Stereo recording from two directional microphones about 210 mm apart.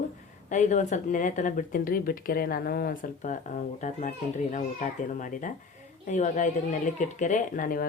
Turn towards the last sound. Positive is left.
turn(degrees=40)  # may be behind; listen again after turning